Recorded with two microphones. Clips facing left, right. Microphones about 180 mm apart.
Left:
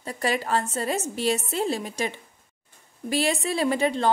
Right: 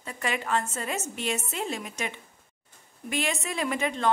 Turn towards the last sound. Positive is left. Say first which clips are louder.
# left 4 dB
turn(degrees=35)  # may be behind; listen again after turning